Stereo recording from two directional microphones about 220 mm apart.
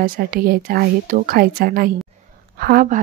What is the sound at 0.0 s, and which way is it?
A woman's voice, 40° right (ahead or behind).